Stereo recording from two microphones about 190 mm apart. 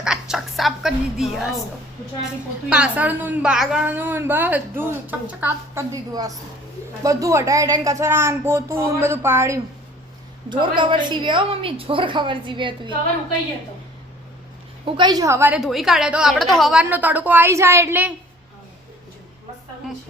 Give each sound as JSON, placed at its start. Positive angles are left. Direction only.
{"t": 0.0, "sound": "a sound", "side_deg": -5}
{"t": 2.6, "sound": "a woman's voice", "side_deg": -5}
{"t": 10.5, "sound": "a woman's voice", "side_deg": -25}
{"t": 14.8, "sound": "a woman's voice", "side_deg": -25}